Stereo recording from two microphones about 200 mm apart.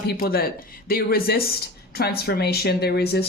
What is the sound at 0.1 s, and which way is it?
A man's voice, 45° left (ahead or behind).